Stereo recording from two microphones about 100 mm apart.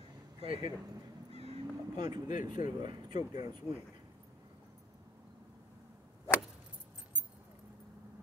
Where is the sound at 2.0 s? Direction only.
45° right (ahead or behind).